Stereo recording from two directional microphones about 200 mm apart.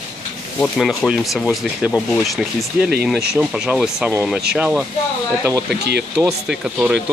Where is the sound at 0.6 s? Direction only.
5° left (ahead or behind).